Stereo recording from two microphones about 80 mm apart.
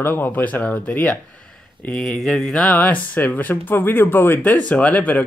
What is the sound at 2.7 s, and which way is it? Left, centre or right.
Speech, centre.